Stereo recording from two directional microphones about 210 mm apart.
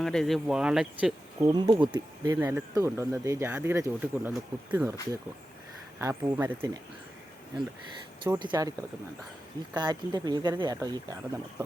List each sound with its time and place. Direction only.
0.0 s speech: centre (ahead or behind)
8.2 s speech: 20° right (ahead or behind)
9.7 s speech: 20° right (ahead or behind)